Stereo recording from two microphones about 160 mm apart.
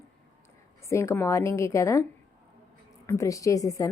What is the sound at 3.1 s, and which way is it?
Speech, 20° left (ahead or behind).